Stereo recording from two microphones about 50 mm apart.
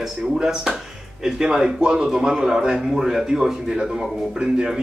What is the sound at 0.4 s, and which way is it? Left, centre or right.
A man's voice, centre.